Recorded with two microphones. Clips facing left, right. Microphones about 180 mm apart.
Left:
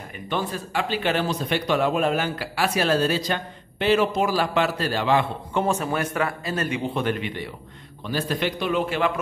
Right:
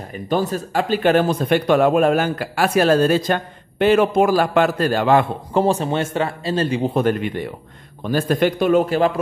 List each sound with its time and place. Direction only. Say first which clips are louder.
0.1 s speech: right 7 dB; 40° right (ahead or behind)
5.6 s a man's voice: right 5 dB; 30° right (ahead or behind)